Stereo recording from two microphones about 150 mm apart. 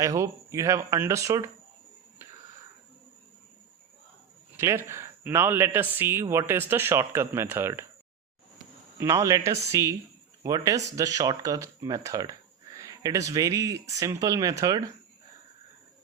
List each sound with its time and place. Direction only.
0.0 s speech: 20° right (ahead or behind)
4.5 s a man's voice: 15° right (ahead or behind)
9.0 s speech: 20° right (ahead or behind)